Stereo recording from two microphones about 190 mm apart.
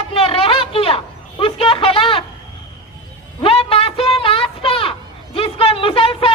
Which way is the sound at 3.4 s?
30° left (ahead or behind).